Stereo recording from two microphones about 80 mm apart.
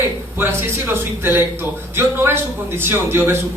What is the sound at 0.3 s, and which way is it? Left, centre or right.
A woman's voice, right.